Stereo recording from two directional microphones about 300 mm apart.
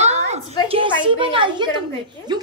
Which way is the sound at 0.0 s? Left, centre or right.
Right.